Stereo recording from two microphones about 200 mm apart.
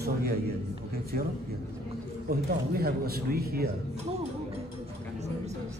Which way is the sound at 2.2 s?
50° right (ahead or behind).